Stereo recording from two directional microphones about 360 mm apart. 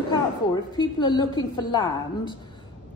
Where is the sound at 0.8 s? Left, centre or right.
Centre.